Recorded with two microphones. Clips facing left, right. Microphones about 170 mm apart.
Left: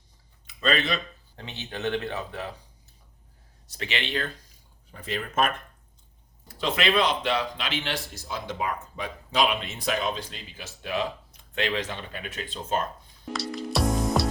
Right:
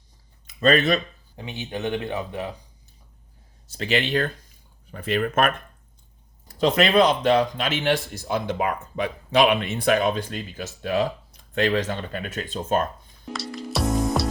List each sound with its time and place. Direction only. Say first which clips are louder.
0.4 s speech: right 7 dB; 45° right (ahead or behind)
1.4 s speech: right 4 dB; 15° right (ahead or behind)
3.7 s speech: right 8 dB; 35° right (ahead or behind)
4.9 s speech: right 9 dB; 65° right (ahead or behind)
6.6 s speech: right 6 dB; 40° right (ahead or behind)
13.2 s music: left 1 dB; centre (ahead or behind)